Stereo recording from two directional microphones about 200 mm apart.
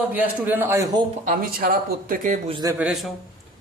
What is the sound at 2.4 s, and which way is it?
Speech, 25° right (ahead or behind).